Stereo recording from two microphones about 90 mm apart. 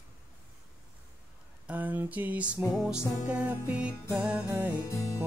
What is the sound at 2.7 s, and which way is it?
Music, 5° right (ahead or behind).